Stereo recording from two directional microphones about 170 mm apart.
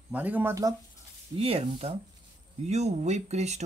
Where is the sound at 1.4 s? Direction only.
35° right (ahead or behind).